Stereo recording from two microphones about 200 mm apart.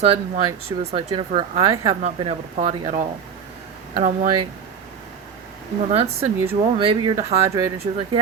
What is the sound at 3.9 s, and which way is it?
Speech, 40° right (ahead or behind).